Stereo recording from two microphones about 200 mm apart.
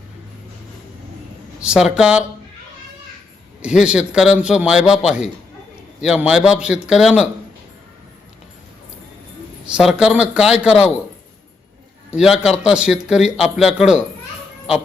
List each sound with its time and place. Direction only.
1.6 s a man's voice: 5° right (ahead or behind)
3.6 s a man's voice: 5° right (ahead or behind)
9.6 s a man's voice: 5° right (ahead or behind)
12.1 s a man's voice: centre (ahead or behind)